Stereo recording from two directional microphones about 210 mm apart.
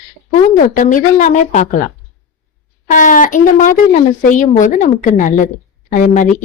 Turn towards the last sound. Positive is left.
turn(degrees=35)  # may be behind; listen again after turning